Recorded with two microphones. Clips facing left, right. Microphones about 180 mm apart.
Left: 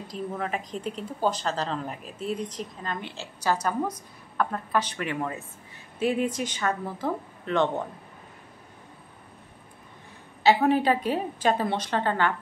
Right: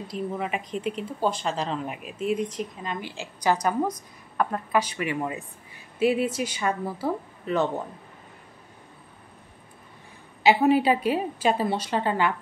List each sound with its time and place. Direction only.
0.1 s speech: 35° left (ahead or behind)
0.8 s a woman's voice: 10° right (ahead or behind)
10.4 s a woman's voice: 10° right (ahead or behind)